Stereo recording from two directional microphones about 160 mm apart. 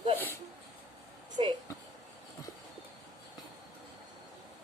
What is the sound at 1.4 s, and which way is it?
Speech, 40° right (ahead or behind).